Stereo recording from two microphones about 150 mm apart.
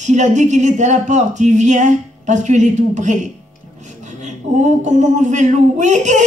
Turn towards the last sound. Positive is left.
turn(degrees=-55)  # may be behind; listen again after turning